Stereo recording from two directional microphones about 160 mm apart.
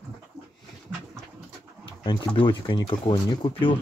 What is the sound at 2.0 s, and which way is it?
Speech, 25° left (ahead or behind).